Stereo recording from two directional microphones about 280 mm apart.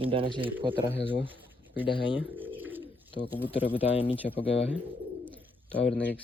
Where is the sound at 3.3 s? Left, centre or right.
Centre.